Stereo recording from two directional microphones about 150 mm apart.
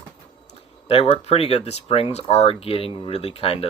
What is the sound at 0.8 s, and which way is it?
Speech, 40° left (ahead or behind).